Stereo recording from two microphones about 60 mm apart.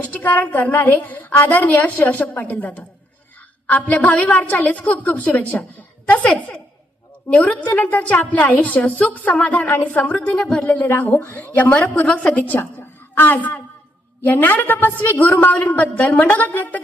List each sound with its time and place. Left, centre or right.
0.0 s a woman's voice: left
7.3 s a woman's voice: left
10.7 s speech: left
11.5 s a woman's voice: left